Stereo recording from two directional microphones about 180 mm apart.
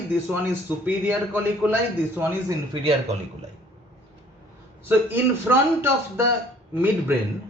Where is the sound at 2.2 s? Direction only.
20° right (ahead or behind).